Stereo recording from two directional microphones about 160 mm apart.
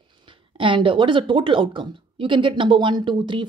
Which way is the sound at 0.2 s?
30° right (ahead or behind).